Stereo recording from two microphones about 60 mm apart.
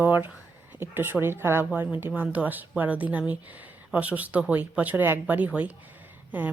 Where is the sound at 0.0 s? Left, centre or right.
Right.